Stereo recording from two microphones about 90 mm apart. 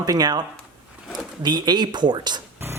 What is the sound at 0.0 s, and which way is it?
Speech, 45° right (ahead or behind).